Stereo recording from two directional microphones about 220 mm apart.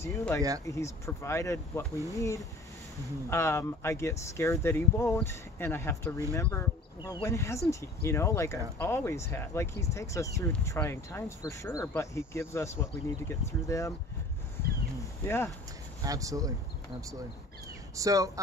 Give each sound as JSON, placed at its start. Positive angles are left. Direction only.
{"t": 0.0, "sound": "speech", "side_deg": 10}
{"t": 15.2, "sound": "speech", "side_deg": 10}
{"t": 16.0, "sound": "speech", "side_deg": -15}
{"t": 17.9, "sound": "speech", "side_deg": -15}